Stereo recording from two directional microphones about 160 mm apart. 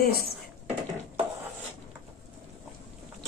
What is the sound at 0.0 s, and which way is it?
Speech, 75° left (ahead or behind).